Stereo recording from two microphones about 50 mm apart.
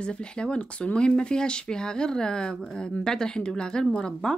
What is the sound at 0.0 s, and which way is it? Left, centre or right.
Speech, centre.